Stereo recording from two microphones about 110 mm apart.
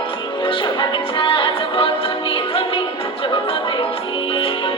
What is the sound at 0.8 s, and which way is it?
Music, 50° left (ahead or behind).